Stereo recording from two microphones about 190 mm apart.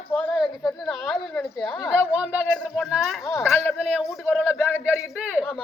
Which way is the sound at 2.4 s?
5° left (ahead or behind).